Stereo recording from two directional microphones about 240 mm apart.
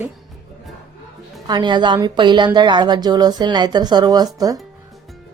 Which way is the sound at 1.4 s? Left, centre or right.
Centre.